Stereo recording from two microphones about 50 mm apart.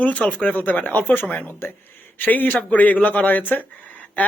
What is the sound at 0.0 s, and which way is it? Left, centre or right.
Speech, left.